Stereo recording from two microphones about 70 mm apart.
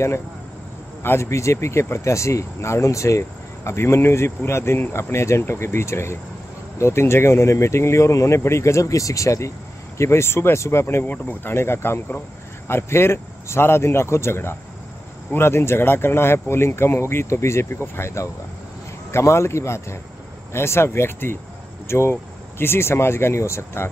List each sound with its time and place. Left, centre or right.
1.0 s speech: left
11.1 s speech: left
11.5 s speech: left